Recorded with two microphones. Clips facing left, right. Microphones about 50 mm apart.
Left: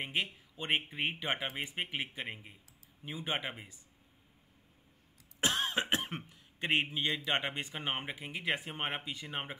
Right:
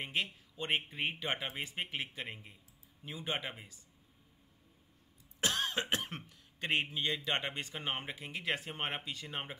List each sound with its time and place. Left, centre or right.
0.0 s speech: centre
5.4 s cough: centre
7.2 s speech: centre